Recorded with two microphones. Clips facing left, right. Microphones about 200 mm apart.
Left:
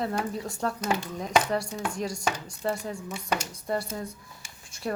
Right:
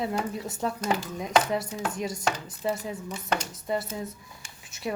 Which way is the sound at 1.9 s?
20° right (ahead or behind).